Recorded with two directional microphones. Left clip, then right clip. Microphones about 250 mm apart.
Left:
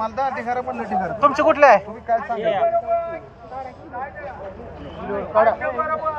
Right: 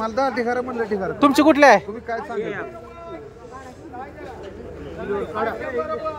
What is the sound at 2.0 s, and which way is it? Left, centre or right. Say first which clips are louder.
Speech: left 5 dB; right.